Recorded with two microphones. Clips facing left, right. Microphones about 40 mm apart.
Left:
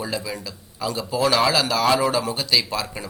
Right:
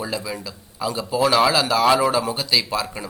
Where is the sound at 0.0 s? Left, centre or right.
Centre.